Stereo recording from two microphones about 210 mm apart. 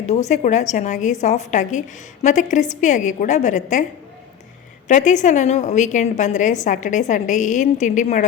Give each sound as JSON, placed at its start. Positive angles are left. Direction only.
{"t": 0.0, "sound": "a woman's voice", "side_deg": 35}
{"t": 4.9, "sound": "a woman's voice", "side_deg": 35}